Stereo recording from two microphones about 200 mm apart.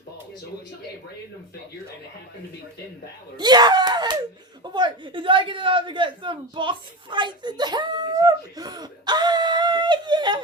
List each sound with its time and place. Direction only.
3.3 s a man's voice: 20° right (ahead or behind)